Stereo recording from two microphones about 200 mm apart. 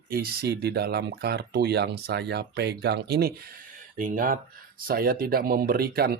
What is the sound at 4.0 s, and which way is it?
Speech, 45° right (ahead or behind).